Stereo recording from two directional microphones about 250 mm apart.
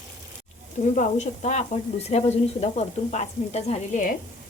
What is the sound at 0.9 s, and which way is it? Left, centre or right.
Frying, left.